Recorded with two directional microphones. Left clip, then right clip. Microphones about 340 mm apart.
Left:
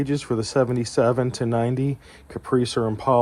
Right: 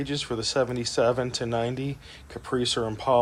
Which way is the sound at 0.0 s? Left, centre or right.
Centre.